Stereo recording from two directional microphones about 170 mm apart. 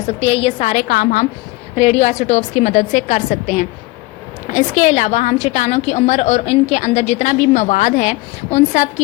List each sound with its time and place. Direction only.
0.1 s a woman's voice: 35° left (ahead or behind)
0.7 s a woman's voice: 60° left (ahead or behind)
1.7 s a woman's voice: 40° left (ahead or behind)